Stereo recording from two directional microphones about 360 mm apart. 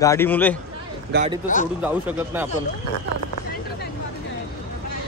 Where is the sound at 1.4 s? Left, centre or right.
Left.